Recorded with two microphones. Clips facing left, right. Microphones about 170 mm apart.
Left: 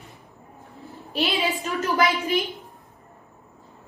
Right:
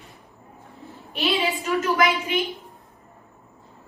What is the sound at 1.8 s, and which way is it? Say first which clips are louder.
Speech: even; 35° left (ahead or behind).